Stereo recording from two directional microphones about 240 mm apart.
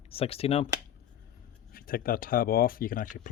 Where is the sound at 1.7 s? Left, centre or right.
Left.